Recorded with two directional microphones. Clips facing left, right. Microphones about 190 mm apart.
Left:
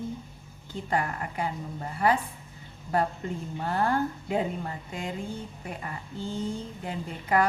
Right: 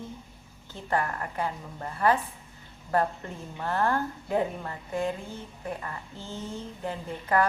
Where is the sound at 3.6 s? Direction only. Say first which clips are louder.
Even; 15° left (ahead or behind).